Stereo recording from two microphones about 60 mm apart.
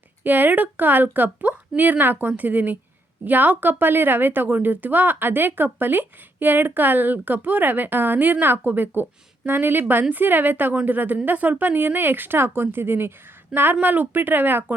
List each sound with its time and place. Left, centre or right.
0.3 s a woman's voice: right